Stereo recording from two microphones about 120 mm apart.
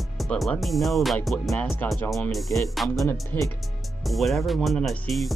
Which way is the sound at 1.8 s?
15° left (ahead or behind).